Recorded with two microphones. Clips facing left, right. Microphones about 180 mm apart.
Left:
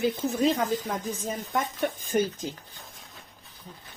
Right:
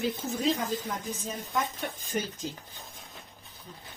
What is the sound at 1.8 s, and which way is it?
Speech, 50° left (ahead or behind).